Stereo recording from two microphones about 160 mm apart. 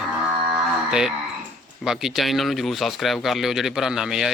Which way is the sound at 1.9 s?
Centre (ahead or behind).